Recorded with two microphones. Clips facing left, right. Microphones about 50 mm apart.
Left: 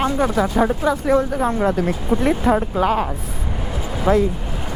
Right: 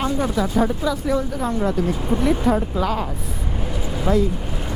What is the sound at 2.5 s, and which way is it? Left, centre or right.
Speech, left.